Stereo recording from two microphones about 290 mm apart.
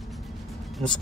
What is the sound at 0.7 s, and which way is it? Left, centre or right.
Speech, centre.